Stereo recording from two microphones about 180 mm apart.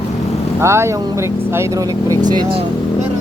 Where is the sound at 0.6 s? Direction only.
15° right (ahead or behind).